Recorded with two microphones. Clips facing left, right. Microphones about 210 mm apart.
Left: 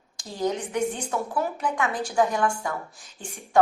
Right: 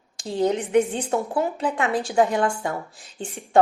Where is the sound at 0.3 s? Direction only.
25° right (ahead or behind).